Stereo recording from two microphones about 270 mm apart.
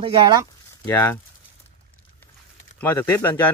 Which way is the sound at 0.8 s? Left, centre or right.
Centre.